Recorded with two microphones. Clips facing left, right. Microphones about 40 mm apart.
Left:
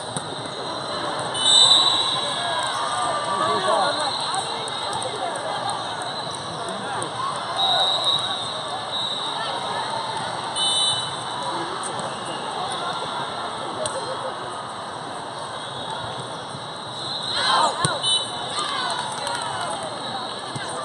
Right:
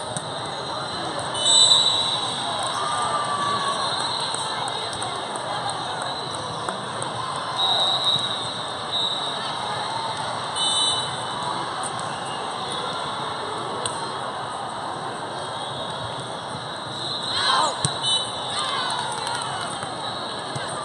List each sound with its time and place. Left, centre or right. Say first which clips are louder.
1.4 s a sound: left 2 dB; centre
2.6 s basketball bounce: left 1 dB; centre
17.4 s basketball bounce: left 2 dB; centre
18.6 s run: even; centre